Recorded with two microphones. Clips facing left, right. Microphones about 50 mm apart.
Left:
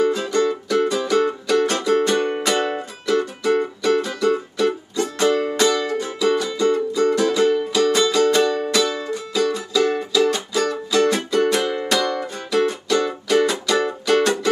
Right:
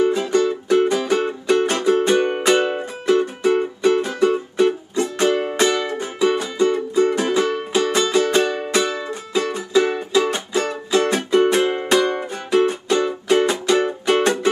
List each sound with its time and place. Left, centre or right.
0.0 s music: right